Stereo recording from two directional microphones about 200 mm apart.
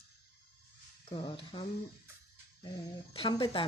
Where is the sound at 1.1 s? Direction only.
25° left (ahead or behind).